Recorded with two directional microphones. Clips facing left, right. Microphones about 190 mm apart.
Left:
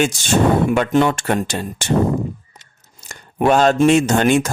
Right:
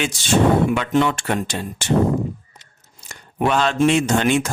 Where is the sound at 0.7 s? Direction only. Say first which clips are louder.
Left 3 dB; 45° left (ahead or behind).